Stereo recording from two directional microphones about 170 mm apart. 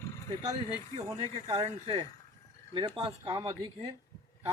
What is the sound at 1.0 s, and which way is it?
Speech, 25° right (ahead or behind).